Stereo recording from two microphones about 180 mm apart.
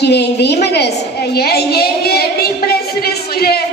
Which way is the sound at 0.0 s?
65° left (ahead or behind).